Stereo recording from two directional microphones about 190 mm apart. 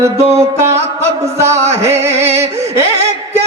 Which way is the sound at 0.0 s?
15° right (ahead or behind).